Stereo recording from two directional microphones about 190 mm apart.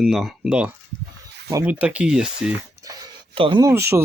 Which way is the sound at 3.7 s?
15° right (ahead or behind).